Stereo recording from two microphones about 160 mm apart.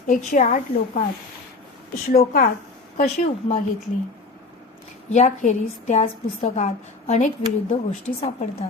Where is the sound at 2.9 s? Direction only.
40° left (ahead or behind).